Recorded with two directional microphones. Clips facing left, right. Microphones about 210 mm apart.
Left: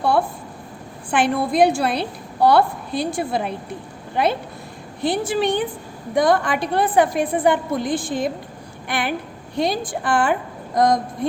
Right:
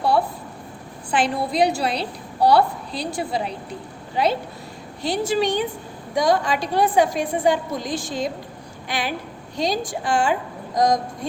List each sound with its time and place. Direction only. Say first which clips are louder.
1.1 s a woman's voice: left 3 dB; 55° left (ahead or behind)
5.0 s a woman's voice: left 1 dB; 55° left (ahead or behind)